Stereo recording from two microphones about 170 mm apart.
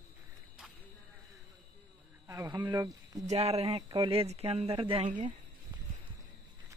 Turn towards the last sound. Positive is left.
turn(degrees=-20)  # may be behind; listen again after turning